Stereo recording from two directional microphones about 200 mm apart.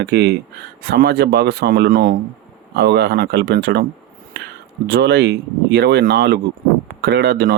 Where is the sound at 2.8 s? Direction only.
55° right (ahead or behind).